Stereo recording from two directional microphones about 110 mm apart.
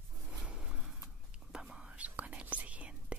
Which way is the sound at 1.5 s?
5° right (ahead or behind).